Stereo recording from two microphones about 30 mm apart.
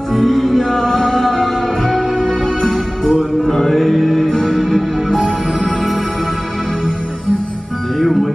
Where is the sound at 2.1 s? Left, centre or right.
Left.